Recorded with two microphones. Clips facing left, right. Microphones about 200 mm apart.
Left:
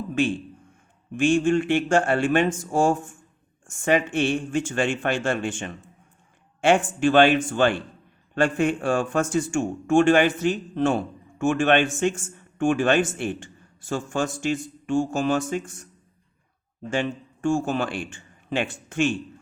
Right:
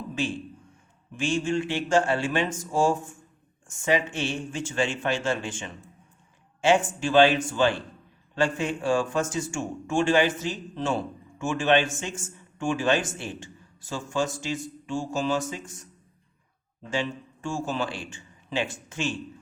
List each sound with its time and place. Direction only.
1.1 s a man's voice: 55° left (ahead or behind)
16.9 s speech: 55° left (ahead or behind)